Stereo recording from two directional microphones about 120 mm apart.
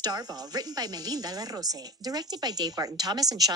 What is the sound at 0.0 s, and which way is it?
Speech, 35° right (ahead or behind).